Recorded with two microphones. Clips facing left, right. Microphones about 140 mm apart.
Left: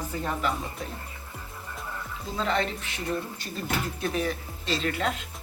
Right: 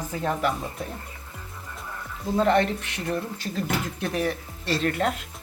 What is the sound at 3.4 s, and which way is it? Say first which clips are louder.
Speech: right 3 dB; 80° right.